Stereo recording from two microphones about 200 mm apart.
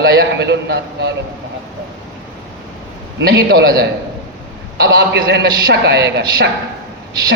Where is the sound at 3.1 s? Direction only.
55° right (ahead or behind).